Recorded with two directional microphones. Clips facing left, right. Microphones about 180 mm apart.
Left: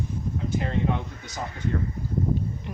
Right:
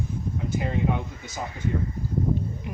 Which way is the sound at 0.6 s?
5° right (ahead or behind).